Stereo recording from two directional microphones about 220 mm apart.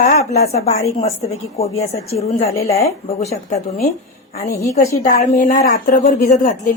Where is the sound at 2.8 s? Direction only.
30° left (ahead or behind).